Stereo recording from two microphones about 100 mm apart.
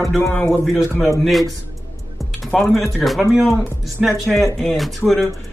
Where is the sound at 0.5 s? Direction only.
Centre (ahead or behind).